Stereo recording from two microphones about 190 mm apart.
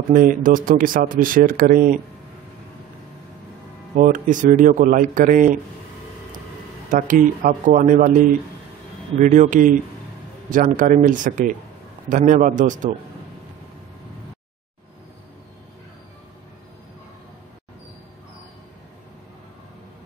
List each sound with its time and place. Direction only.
0.1 s speech: 45° right (ahead or behind)
3.9 s speech: 45° right (ahead or behind)
6.9 s speech: 45° right (ahead or behind)
9.2 s a man's voice: 40° right (ahead or behind)